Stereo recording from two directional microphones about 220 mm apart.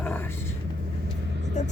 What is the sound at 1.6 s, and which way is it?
Speech, 35° left (ahead or behind).